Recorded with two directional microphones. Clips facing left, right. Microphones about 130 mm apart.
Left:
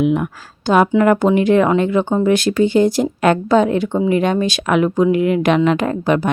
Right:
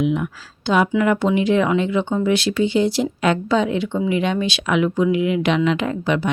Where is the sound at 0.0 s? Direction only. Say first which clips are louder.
Left 4 dB; 50° left (ahead or behind).